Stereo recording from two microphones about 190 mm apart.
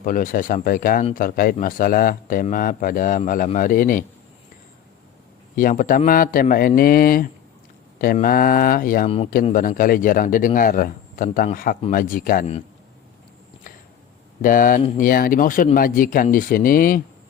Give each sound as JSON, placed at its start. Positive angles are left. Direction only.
{"t": 0.0, "sound": "a man's voice", "side_deg": 45}
{"t": 5.5, "sound": "a man's voice", "side_deg": 45}
{"t": 9.0, "sound": "speech", "side_deg": 30}
{"t": 9.3, "sound": "a man's voice", "side_deg": 45}
{"t": 14.4, "sound": "a man's voice", "side_deg": 45}